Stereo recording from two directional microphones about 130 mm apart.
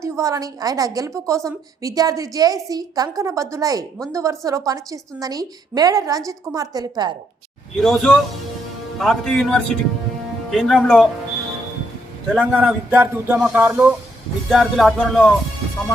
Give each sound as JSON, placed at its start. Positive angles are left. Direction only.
{"t": 0.0, "sound": "a woman's voice", "side_deg": -25}
{"t": 7.8, "sound": "a man's voice", "side_deg": 0}
{"t": 12.3, "sound": "a man's voice", "side_deg": -10}
{"t": 14.5, "sound": "a man's voice", "side_deg": 0}